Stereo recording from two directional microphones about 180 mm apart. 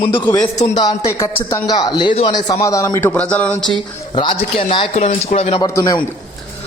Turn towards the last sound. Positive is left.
turn(degrees=20)  # may be behind; listen again after turning